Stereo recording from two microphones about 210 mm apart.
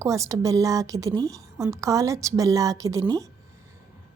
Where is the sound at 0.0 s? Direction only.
15° right (ahead or behind).